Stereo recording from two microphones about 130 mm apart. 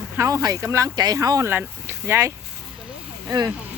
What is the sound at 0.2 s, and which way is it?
Speech, 25° right (ahead or behind).